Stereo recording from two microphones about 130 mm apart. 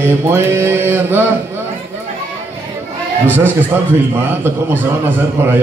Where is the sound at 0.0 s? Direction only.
20° right (ahead or behind).